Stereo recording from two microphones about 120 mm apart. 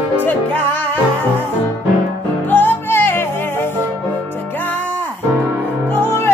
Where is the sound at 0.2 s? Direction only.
15° left (ahead or behind).